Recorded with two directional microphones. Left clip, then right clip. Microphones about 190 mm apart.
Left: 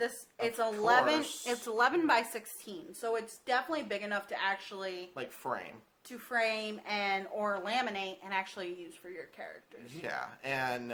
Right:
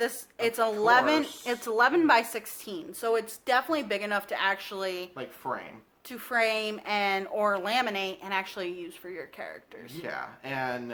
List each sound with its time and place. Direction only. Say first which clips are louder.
0.0 s speech: right 5 dB; 35° right (ahead or behind)
5.1 s speech: right 3 dB; 50° left (ahead or behind)
6.1 s speech: right 5 dB; 30° right (ahead or behind)
10.0 s speech: right 2 dB; 50° left (ahead or behind)